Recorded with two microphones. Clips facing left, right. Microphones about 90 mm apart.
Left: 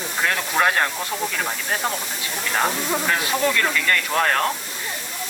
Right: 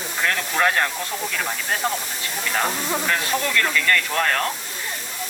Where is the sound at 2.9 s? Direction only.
5° left (ahead or behind).